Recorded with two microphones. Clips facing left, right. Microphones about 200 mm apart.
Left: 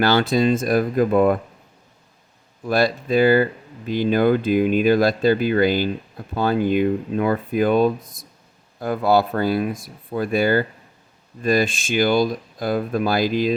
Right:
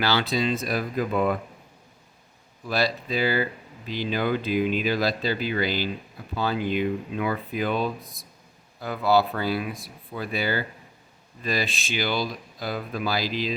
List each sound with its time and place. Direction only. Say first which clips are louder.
0.0 s speech: left 7 dB; 50° left (ahead or behind)
2.6 s speech: left 6 dB; 50° left (ahead or behind)